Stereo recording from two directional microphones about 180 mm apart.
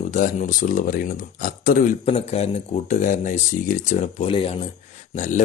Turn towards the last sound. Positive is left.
turn(degrees=45)  # may be behind; listen again after turning